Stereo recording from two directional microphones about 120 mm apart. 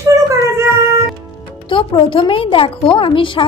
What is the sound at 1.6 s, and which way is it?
A woman's voice, 45° left (ahead or behind).